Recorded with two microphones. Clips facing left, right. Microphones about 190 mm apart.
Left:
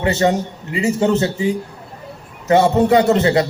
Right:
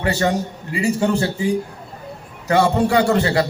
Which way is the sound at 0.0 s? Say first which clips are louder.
Left 3 dB; 20° left (ahead or behind).